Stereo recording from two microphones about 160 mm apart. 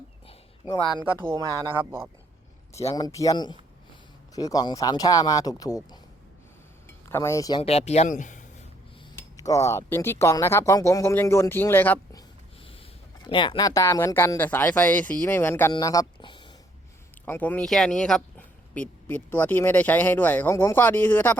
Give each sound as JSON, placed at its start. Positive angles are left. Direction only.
{"t": 0.3, "sound": "a sound", "side_deg": 25}
{"t": 1.2, "sound": "speech", "side_deg": -15}
{"t": 2.9, "sound": "speech", "side_deg": 20}
{"t": 6.8, "sound": "chink", "side_deg": 15}
{"t": 7.6, "sound": "speech", "side_deg": 40}
{"t": 9.4, "sound": "speech", "side_deg": 20}
{"t": 13.2, "sound": "speech", "side_deg": 30}
{"t": 17.2, "sound": "speech", "side_deg": 10}